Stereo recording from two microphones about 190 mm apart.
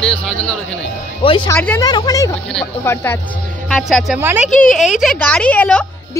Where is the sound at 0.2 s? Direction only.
5° left (ahead or behind).